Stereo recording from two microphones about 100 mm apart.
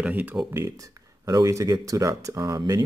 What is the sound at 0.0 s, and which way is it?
Speech, 15° right (ahead or behind).